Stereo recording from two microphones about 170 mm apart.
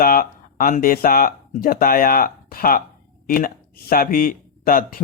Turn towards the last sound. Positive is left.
turn(degrees=55)  # may be behind; listen again after turning